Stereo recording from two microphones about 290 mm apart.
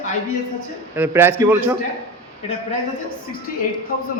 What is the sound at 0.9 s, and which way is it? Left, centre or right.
Speech, centre.